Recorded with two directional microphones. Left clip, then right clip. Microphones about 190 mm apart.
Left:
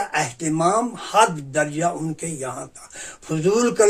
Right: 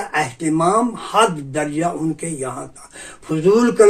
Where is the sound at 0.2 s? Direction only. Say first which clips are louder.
Right 5 dB; 30° left (ahead or behind).